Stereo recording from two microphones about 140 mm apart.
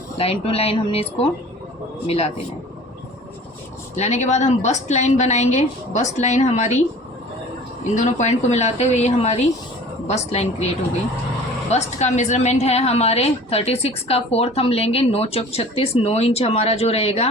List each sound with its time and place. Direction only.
0.2 s a woman's voice: 45° left (ahead or behind)
3.9 s a woman's voice: 55° left (ahead or behind)
7.9 s a woman's voice: 55° left (ahead or behind)
11.7 s a woman's voice: 55° left (ahead or behind)